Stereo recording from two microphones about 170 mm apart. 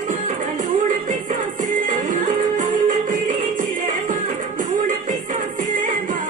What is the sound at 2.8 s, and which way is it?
Music, 50° right (ahead or behind).